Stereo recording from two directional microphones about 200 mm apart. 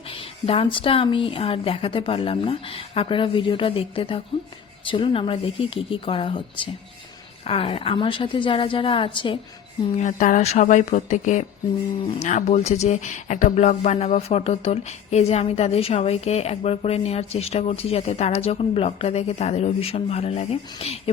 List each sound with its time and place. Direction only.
0.1 s speech: 25° left (ahead or behind)
9.9 s speech: 40° left (ahead or behind)